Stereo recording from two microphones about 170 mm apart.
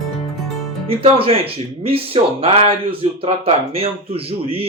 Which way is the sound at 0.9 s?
35° right (ahead or behind).